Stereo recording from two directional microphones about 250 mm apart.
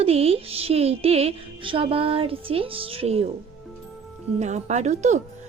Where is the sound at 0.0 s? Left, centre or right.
Right.